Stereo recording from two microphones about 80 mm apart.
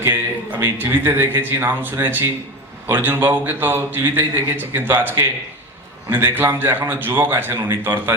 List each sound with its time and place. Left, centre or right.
0.0 s a man's voice: right